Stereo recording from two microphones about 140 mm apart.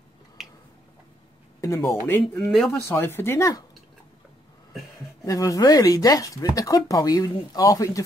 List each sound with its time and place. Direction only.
0.4 s a sound: centre (ahead or behind)
1.8 s speech: 10° left (ahead or behind)
2.5 s speech: centre (ahead or behind)
2.8 s speech: 15° left (ahead or behind)
5.2 s speech: 25° left (ahead or behind)